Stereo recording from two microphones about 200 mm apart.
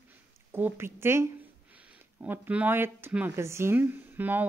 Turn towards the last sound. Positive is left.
turn(degrees=-10)  # may be behind; listen again after turning